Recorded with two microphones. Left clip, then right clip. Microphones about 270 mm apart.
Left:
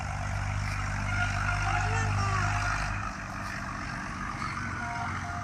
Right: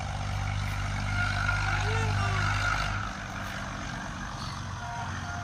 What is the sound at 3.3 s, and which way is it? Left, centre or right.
Vehicle, centre.